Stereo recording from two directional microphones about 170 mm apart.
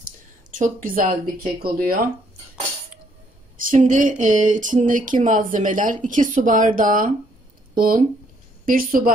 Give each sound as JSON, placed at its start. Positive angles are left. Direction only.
{"t": 0.5, "sound": "speech", "side_deg": -55}
{"t": 3.5, "sound": "speech", "side_deg": -50}